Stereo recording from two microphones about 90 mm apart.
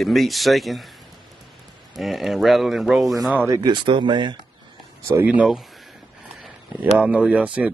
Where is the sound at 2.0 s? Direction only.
Centre (ahead or behind).